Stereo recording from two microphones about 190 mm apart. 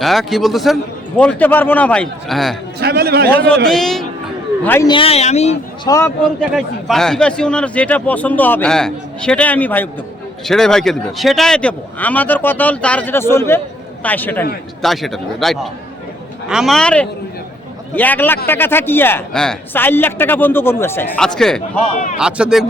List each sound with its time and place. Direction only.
0.0 s a man's voice: centre (ahead or behind)
2.8 s a man's voice: 55° right (ahead or behind)
3.7 s a man's voice: centre (ahead or behind)
4.9 s speech: 30° left (ahead or behind)
6.5 s a man's voice: centre (ahead or behind)